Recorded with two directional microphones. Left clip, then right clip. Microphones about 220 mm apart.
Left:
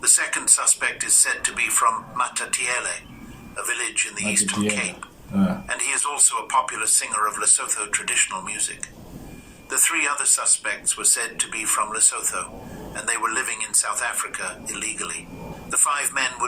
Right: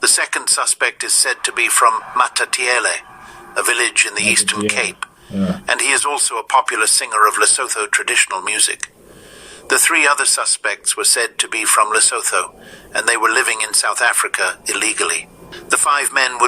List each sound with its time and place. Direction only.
0.0 s speech: 45° right (ahead or behind)